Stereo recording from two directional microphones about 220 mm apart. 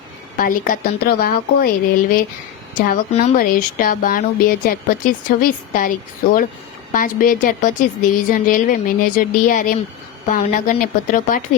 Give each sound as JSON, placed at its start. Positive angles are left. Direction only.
{"t": 0.3, "sound": "speech", "side_deg": 40}
{"t": 6.9, "sound": "speech", "side_deg": 40}